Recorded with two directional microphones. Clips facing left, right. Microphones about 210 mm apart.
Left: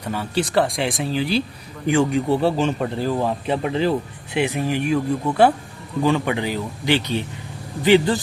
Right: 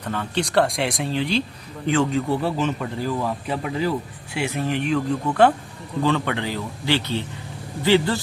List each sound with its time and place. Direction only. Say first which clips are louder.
0.0 s speech: left 2 dB; 10° left (ahead or behind)
2.4 s speech: left 4 dB; 30° left (ahead or behind)